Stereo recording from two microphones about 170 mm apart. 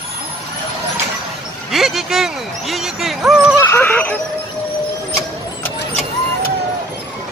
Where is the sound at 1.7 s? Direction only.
Centre (ahead or behind).